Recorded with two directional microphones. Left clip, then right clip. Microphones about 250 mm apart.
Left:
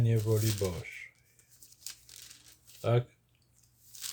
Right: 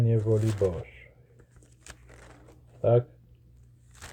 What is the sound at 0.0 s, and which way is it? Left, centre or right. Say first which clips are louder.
Speech: right 5 dB; centre.